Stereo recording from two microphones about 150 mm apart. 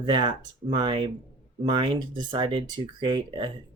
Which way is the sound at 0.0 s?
30° right (ahead or behind).